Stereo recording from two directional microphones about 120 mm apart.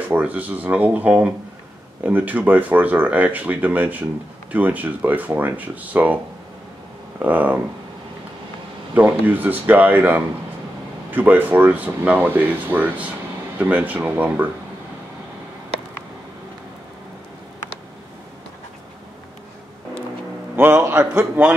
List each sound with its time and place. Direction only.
0.1 s speech: 15° right (ahead or behind)
8.9 s speech: 15° right (ahead or behind)
20.5 s a man's voice: 20° right (ahead or behind)
21.1 s speech: 10° right (ahead or behind)